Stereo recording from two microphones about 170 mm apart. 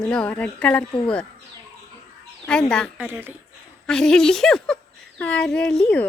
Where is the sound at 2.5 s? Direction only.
5° left (ahead or behind).